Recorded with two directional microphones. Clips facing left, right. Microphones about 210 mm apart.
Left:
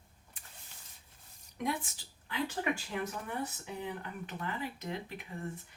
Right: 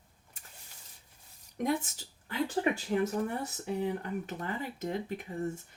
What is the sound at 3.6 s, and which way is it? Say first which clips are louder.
Speech: right 7 dB; 40° right (ahead or behind).